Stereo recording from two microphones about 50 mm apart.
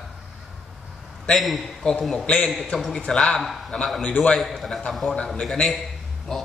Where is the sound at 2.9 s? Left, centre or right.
Centre.